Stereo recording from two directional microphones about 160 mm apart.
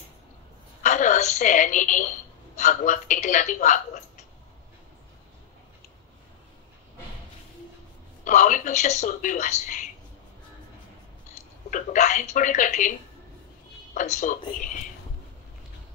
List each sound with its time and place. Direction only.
0.8 s a woman's voice: 50° left (ahead or behind)
8.3 s speech: 55° left (ahead or behind)
11.7 s speech: 50° left (ahead or behind)
13.9 s speech: 50° left (ahead or behind)